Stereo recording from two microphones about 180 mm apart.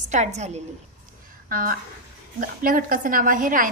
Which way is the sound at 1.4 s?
50° right (ahead or behind).